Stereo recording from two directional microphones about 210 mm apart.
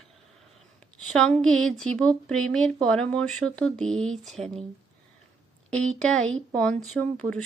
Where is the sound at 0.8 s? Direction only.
5° left (ahead or behind).